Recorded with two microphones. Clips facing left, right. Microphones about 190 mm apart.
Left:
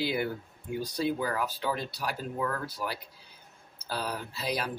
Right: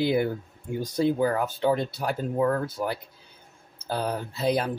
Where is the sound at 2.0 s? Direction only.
40° right (ahead or behind).